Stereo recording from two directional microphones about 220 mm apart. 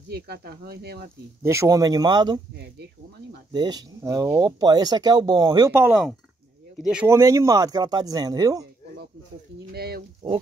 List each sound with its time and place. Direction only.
0.1 s speech: 45° right (ahead or behind)
1.4 s speech: 15° right (ahead or behind)
3.5 s speech: 20° right (ahead or behind)
9.8 s speech: 45° right (ahead or behind)